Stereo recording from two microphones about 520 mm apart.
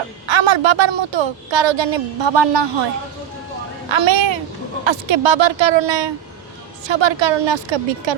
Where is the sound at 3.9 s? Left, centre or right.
Right.